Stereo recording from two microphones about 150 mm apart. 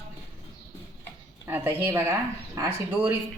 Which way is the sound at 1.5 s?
15° right (ahead or behind).